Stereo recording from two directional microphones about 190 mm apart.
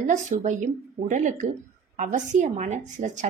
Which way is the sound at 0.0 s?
40° right (ahead or behind).